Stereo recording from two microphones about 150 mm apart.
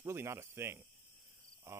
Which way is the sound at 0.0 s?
15° right (ahead or behind).